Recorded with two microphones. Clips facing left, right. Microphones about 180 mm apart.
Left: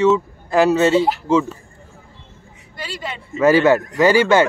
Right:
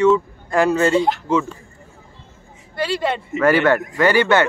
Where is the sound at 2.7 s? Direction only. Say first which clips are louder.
Right 9 dB; 65° right (ahead or behind).